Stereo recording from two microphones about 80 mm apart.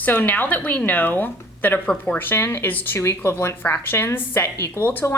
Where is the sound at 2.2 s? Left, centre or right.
Left.